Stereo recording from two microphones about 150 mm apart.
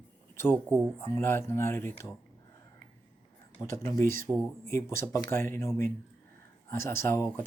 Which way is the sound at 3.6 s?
20° left (ahead or behind).